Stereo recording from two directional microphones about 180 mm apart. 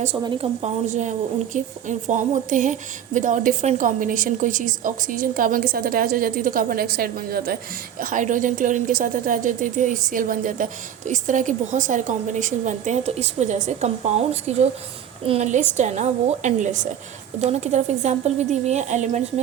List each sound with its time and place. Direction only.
0.2 s a woman's voice: 30° right (ahead or behind); by 7.6 s 55° right (ahead or behind)
8.0 s a woman's voice: 45° right (ahead or behind)